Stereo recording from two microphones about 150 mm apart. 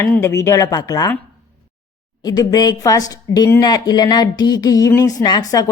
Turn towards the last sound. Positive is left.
turn(degrees=25)  # may be behind; listen again after turning